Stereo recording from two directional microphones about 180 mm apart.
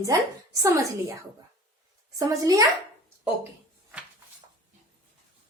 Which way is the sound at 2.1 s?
20° right (ahead or behind).